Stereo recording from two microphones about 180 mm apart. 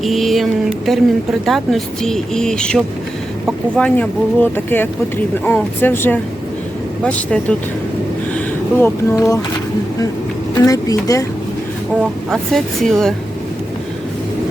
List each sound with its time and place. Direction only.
0.0 s speech: centre (ahead or behind)
8.8 s speech: 15° left (ahead or behind)
10.5 s speech: 20° left (ahead or behind)
12.3 s speech: centre (ahead or behind)